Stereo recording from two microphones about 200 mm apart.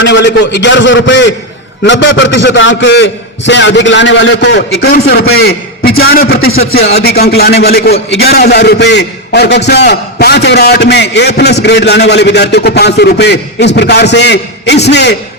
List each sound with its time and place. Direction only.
0.0 s a man's voice: 60° left (ahead or behind)